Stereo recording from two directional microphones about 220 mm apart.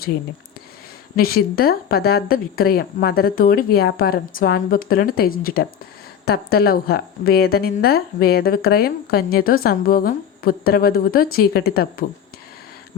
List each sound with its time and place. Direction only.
1.1 s a woman's voice: 45° left (ahead or behind)